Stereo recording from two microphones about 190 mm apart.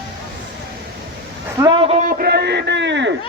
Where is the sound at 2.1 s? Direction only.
50° right (ahead or behind); by 3.1 s 70° right (ahead or behind).